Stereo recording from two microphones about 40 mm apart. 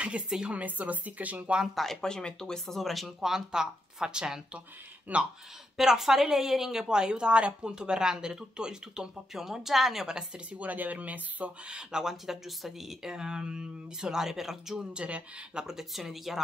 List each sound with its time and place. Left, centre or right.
0.5 s speech: right
2.0 s speech: centre
2.6 s speech: centre
3.3 s a woman's voice: centre
5.1 s speech: right
5.8 s a woman's voice: centre
9.3 s a woman's voice: centre
10.0 s speech: right
10.6 s speech: right
11.6 s speech: right
12.0 s a woman's voice: centre
15.0 s speech: right
15.6 s a woman's voice: centre